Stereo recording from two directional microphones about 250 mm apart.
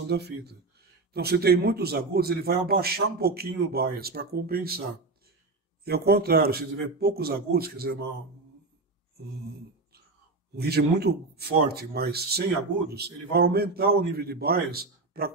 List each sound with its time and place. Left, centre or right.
0.1 s speech: right
5.9 s speech: right
10.5 s speech: right